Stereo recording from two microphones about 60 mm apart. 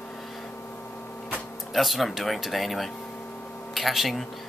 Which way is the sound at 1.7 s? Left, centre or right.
Centre.